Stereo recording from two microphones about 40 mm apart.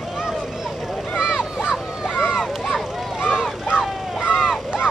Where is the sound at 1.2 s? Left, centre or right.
Centre.